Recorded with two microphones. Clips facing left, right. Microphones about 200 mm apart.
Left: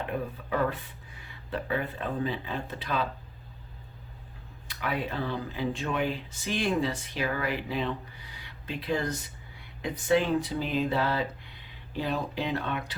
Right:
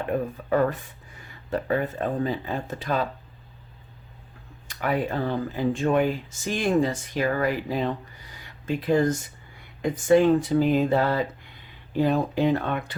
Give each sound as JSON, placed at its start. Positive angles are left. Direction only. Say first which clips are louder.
{"t": 0.5, "sound": "speech", "louder": "right 6 dB", "side_deg": -45}
{"t": 4.7, "sound": "speech", "louder": "right 6 dB", "side_deg": -45}